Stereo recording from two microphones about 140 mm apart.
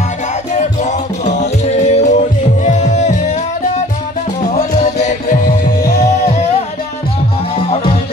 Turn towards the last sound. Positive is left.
turn(degrees=55)  # may be behind; listen again after turning